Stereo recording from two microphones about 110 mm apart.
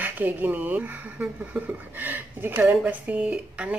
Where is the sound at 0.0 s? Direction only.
15° right (ahead or behind).